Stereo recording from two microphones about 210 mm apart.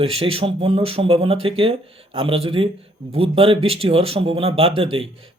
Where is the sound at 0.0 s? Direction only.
25° right (ahead or behind).